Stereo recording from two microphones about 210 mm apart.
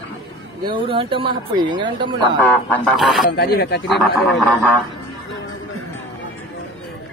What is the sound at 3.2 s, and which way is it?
Speech, 50° left (ahead or behind).